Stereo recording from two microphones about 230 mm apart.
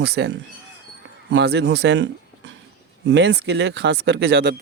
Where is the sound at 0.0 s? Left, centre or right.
Right.